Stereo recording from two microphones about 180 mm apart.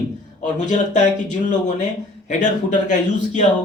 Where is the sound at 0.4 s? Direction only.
40° left (ahead or behind).